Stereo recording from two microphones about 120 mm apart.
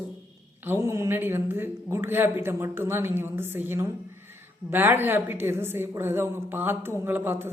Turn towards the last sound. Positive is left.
turn(degrees=-20)  # may be behind; listen again after turning